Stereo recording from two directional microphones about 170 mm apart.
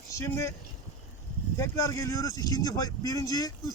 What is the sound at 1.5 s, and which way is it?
Speech, 20° left (ahead or behind).